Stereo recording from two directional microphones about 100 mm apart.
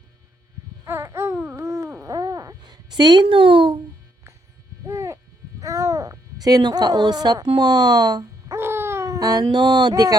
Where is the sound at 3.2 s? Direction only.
60° right (ahead or behind).